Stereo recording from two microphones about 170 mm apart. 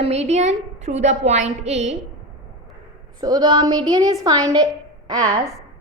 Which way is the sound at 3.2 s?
25° right (ahead or behind).